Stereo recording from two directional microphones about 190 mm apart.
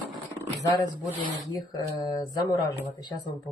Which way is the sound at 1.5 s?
20° left (ahead or behind).